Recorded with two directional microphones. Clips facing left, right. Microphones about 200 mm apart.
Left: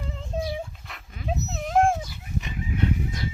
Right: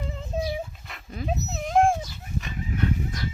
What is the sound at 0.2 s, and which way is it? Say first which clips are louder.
Dog: even; 5° right (ahead or behind).